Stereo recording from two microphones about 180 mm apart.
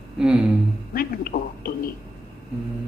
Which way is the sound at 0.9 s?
55° left (ahead or behind).